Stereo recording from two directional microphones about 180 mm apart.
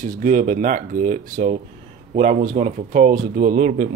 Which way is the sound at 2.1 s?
40° right (ahead or behind).